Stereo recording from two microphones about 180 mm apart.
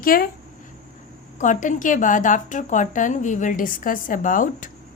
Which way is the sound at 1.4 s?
45° left (ahead or behind).